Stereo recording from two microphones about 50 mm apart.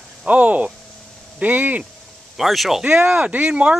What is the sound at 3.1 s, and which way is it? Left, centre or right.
Speech, right.